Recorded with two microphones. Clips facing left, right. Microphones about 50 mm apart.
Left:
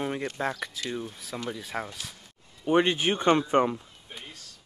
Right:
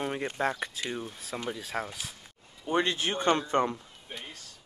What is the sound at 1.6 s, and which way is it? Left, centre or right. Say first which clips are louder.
Speech: even; centre.